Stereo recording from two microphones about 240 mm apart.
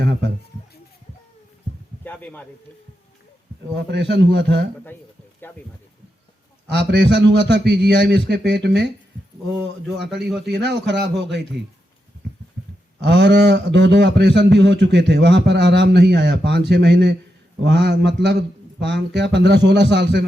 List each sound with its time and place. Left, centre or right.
0.0 s a sound: right
2.0 s speech: centre
3.9 s a man's voice: right
6.7 s a man's voice: right
10.4 s a man's voice: right
13.0 s a man's voice: right